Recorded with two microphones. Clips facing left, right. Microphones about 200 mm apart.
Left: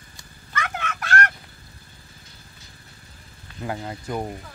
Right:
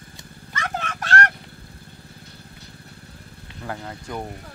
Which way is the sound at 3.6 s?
10° left (ahead or behind).